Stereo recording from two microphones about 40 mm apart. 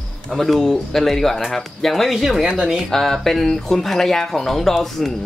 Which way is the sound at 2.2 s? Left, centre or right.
Centre.